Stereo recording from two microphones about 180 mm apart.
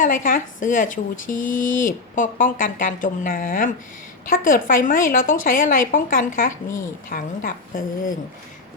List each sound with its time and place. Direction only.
0.0 s speech: 50° left (ahead or behind)